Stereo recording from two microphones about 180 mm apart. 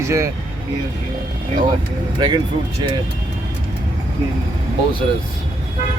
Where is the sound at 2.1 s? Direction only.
25° right (ahead or behind).